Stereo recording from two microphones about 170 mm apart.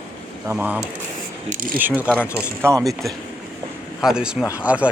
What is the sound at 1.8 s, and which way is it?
Speech, 10° right (ahead or behind).